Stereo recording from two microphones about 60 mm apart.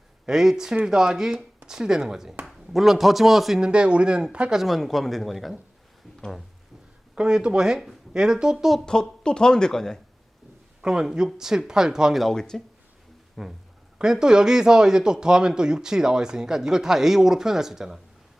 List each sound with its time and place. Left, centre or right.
0.3 s speech: centre
3.6 s speech: centre
4.6 s speech: centre
7.2 s speech: centre
8.9 s a woman's voice: centre
10.8 s speech: centre
12.2 s a woman's voice: centre